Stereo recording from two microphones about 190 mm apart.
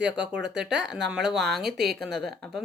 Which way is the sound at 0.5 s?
65° right (ahead or behind).